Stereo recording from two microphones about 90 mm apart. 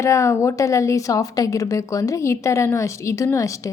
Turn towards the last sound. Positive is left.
turn(degrees=35)  # may be behind; listen again after turning